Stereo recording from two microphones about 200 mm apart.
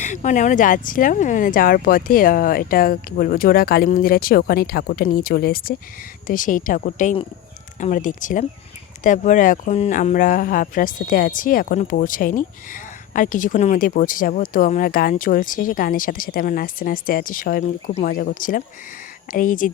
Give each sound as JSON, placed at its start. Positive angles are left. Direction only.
{"t": 0.0, "sound": "a woman's voice", "side_deg": 35}